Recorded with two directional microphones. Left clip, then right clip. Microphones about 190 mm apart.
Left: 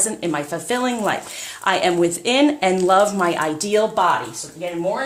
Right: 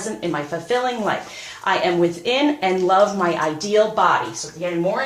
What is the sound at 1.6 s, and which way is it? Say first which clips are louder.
Speech: left 1 dB; 50° left (ahead or behind).